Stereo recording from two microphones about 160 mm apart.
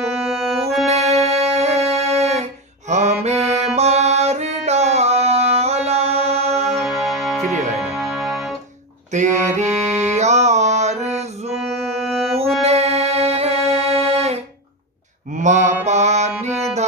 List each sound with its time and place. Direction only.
0.0 s music: centre (ahead or behind)
0.8 s music: 40° right (ahead or behind)
6.8 s music: centre (ahead or behind)
9.1 s music: 50° right (ahead or behind)
11.5 s music: centre (ahead or behind)
12.6 s music: 40° right (ahead or behind)
15.3 s mantra: 50° right (ahead or behind)
15.8 s music: 45° right (ahead or behind)